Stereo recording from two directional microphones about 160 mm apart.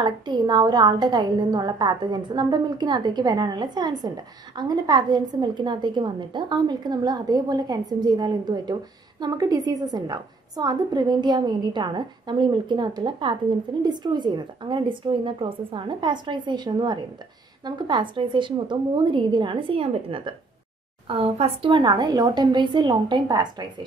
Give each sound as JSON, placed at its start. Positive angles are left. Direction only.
{"t": 0.0, "sound": "a woman's voice", "side_deg": -30}